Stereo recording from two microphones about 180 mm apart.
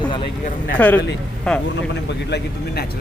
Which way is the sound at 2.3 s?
65° left (ahead or behind).